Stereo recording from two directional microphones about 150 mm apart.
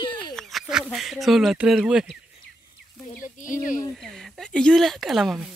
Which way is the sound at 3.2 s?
60° left (ahead or behind).